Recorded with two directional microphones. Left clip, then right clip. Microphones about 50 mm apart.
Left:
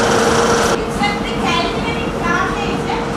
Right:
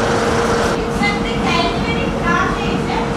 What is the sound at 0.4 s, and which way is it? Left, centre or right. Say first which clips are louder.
Vehicle: left 2 dB; left.